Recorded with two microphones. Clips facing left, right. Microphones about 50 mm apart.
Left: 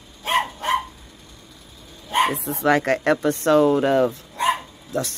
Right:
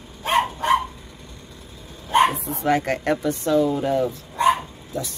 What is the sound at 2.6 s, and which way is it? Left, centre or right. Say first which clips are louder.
Speech: left 3 dB; left.